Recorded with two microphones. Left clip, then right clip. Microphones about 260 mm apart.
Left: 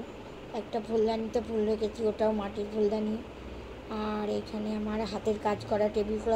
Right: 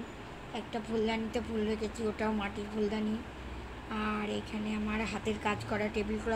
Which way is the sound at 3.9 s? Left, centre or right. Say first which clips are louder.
Left 3 dB; centre.